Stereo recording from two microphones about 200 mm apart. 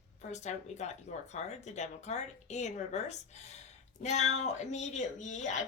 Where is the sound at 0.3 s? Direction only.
35° left (ahead or behind).